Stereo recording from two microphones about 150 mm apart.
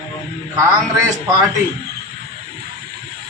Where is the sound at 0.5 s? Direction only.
20° right (ahead or behind).